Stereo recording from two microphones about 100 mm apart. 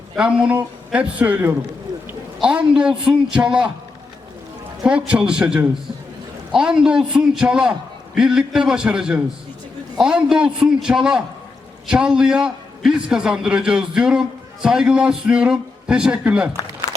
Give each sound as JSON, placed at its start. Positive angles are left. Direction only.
{"t": 0.2, "sound": "a man's voice", "side_deg": -10}
{"t": 4.8, "sound": "a man's voice", "side_deg": -10}